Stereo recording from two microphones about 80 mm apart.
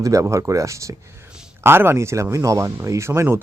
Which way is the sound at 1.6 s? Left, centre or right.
Right.